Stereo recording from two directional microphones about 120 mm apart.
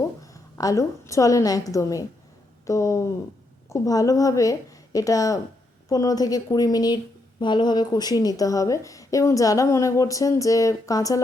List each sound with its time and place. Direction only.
0.2 s a woman's voice: 30° left (ahead or behind)